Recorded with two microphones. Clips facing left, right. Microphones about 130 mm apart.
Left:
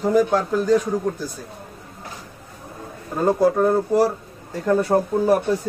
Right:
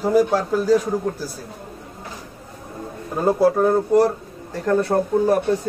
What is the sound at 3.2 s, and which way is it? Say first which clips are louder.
A man's voice: right 1 dB; 10° right (ahead or behind).